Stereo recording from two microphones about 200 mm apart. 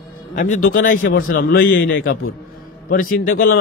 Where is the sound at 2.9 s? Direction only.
45° left (ahead or behind).